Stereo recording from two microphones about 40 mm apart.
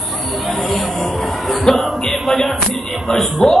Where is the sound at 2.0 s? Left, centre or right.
Centre.